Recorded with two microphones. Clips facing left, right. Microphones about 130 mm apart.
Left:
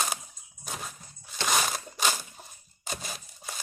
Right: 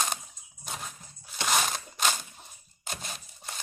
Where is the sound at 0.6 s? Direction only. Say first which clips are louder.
Left 1 dB; centre (ahead or behind).